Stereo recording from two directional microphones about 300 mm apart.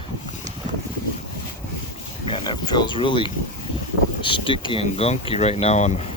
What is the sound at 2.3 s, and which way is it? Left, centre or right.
Speech, centre.